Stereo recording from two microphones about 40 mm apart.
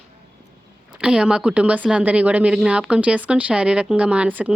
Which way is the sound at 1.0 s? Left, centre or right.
Right.